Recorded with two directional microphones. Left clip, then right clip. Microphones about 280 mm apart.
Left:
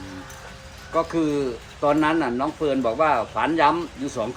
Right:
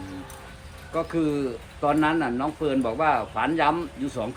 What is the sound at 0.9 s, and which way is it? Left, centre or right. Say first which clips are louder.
Speech: left 3 dB; centre.